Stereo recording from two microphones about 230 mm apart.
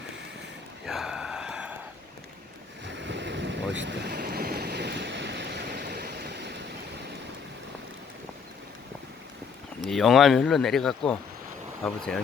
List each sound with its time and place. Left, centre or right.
0.9 s a sound: centre
2.8 s waves: right
9.8 s speech: centre